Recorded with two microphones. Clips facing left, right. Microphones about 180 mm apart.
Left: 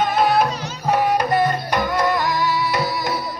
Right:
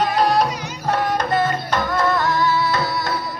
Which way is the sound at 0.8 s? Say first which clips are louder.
Left 2 dB; 10° left (ahead or behind).